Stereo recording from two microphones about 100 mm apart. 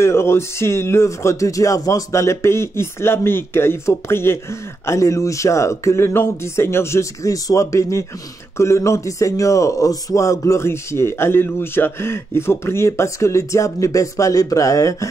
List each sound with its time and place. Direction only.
0.0 s a man's voice: 25° left (ahead or behind)